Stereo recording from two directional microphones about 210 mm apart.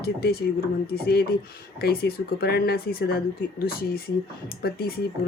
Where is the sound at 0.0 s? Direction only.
50° left (ahead or behind).